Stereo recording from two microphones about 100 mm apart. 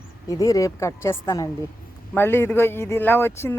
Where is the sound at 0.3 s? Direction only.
35° left (ahead or behind).